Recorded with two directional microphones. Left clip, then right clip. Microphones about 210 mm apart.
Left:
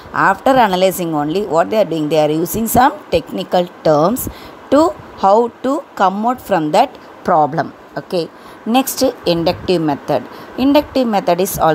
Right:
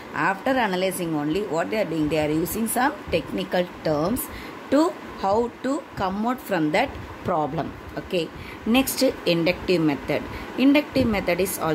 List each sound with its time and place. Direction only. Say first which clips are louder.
0.1 s a woman's voice: left 11 dB; 30° left (ahead or behind)